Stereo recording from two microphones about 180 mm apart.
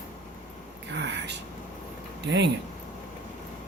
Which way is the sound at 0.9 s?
80° right.